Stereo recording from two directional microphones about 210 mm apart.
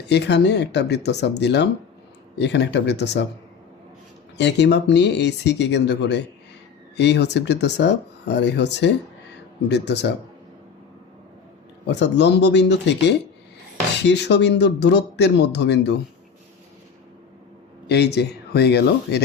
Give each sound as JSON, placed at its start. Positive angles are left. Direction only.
{"t": 0.1, "sound": "speech", "side_deg": 55}
{"t": 4.4, "sound": "speech", "side_deg": 55}
{"t": 11.9, "sound": "speech", "side_deg": 55}
{"t": 17.8, "sound": "speech", "side_deg": 50}